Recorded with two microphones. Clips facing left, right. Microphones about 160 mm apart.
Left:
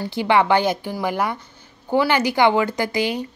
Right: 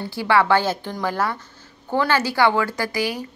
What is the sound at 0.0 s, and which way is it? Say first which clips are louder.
A woman's voice: left 1 dB; 20° left (ahead or behind).